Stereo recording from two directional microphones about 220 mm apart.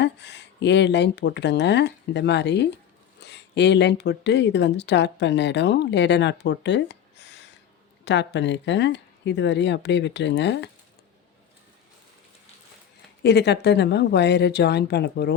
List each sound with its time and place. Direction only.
0.0 s speech: 50° left (ahead or behind)
13.2 s speech: 50° left (ahead or behind)